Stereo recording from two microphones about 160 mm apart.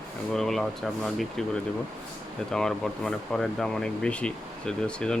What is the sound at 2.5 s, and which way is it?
Speech, 5° left (ahead or behind).